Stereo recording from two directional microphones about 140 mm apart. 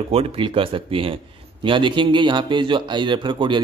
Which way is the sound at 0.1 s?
40° right (ahead or behind).